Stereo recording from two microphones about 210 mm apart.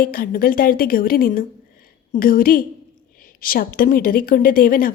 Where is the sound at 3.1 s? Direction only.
45° left (ahead or behind).